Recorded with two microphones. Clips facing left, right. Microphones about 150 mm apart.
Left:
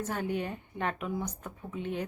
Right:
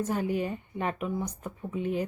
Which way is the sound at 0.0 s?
5° right (ahead or behind).